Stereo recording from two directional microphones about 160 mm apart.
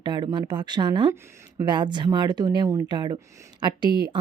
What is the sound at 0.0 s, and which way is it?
A woman's voice, 30° right (ahead or behind).